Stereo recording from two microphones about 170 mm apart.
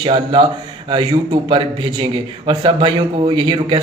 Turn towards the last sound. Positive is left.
turn(degrees=-30)  # may be behind; listen again after turning